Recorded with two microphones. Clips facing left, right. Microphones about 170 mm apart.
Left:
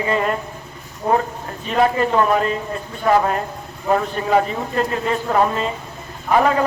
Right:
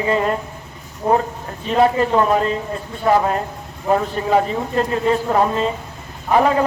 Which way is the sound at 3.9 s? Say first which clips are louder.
Right 1 dB; 15° right (ahead or behind).